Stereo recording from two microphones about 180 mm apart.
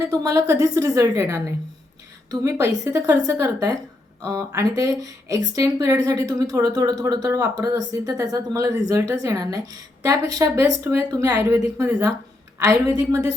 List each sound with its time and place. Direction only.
0.1 s a woman's voice: 20° right (ahead or behind)